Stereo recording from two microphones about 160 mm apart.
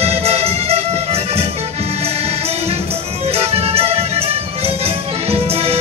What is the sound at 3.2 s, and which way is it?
Music, 40° right (ahead or behind).